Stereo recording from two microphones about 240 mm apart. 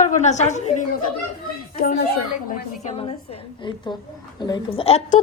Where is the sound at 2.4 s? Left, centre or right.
Left.